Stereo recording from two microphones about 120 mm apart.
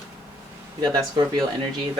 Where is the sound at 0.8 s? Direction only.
30° right (ahead or behind).